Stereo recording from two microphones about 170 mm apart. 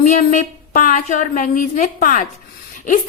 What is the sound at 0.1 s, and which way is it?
Speech, 45° left (ahead or behind).